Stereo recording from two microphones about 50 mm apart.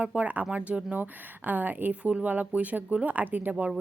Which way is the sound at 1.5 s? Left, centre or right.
Right.